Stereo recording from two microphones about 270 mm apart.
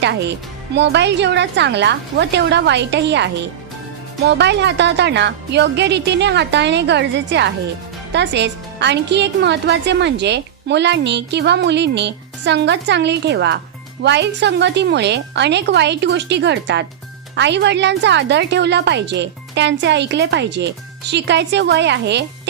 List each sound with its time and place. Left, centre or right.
0.0 s a woman's voice: right
4.3 s a woman's voice: right